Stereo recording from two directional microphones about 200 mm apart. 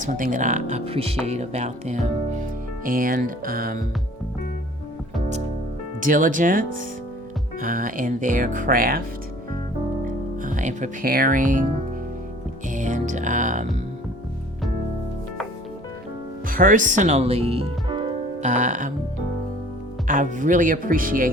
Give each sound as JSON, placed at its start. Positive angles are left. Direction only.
{"t": 0.0, "sound": "speech", "side_deg": -40}
{"t": 6.0, "sound": "speech", "side_deg": -40}
{"t": 10.1, "sound": "speech", "side_deg": -40}
{"t": 12.7, "sound": "music", "side_deg": -40}
{"t": 16.5, "sound": "speech", "side_deg": -45}
{"t": 18.4, "sound": "speech", "side_deg": -40}
{"t": 20.1, "sound": "speech", "side_deg": -40}